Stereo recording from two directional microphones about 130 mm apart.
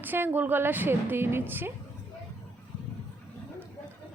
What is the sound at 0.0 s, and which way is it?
A woman's voice, 15° right (ahead or behind).